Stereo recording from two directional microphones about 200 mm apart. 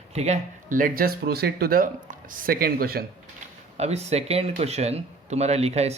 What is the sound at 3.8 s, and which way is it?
Speech, 30° right (ahead or behind).